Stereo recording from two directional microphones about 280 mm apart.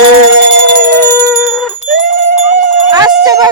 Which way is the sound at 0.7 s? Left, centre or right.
Right.